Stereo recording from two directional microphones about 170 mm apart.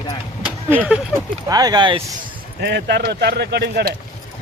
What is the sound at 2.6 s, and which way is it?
Speech, 75° right (ahead or behind).